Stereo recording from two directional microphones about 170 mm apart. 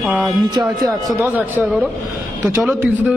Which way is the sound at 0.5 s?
20° right (ahead or behind).